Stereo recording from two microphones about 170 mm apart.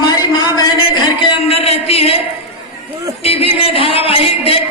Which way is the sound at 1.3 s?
35° left (ahead or behind).